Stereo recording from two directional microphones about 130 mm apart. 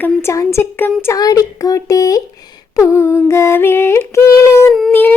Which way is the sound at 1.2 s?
30° left (ahead or behind).